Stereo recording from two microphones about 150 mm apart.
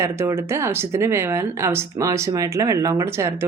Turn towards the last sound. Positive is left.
turn(degrees=-20)  # may be behind; listen again after turning